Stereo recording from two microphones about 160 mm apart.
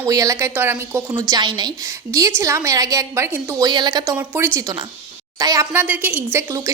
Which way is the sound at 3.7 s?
25° right (ahead or behind).